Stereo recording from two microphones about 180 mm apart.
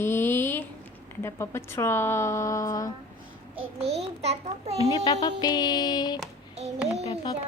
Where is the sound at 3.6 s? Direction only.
35° right (ahead or behind).